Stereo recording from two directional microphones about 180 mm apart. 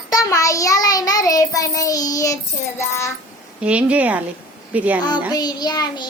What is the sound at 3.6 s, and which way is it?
A woman's voice, 5° right (ahead or behind).